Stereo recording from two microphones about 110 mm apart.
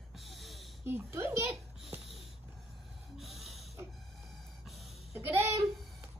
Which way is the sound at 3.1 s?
Centre (ahead or behind).